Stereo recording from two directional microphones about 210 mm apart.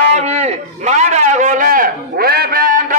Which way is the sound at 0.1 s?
30° right (ahead or behind).